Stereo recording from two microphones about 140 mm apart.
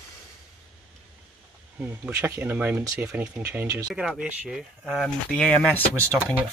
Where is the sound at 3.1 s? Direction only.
10° right (ahead or behind).